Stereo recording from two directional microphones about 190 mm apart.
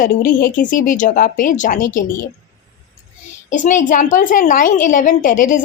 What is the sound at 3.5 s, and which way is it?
A woman's voice, 40° left (ahead or behind).